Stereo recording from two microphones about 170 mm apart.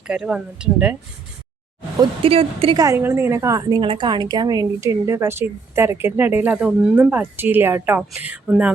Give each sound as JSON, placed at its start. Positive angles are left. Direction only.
{"t": 0.1, "sound": "speech", "side_deg": -5}
{"t": 2.0, "sound": "a woman's voice", "side_deg": -35}
{"t": 2.7, "sound": "a woman's voice", "side_deg": -20}